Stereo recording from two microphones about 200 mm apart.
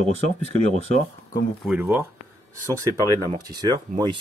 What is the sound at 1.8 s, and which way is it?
Speech, 10° right (ahead or behind).